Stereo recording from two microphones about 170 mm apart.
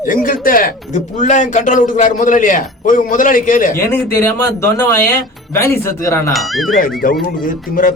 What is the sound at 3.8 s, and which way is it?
Speech, 15° left (ahead or behind).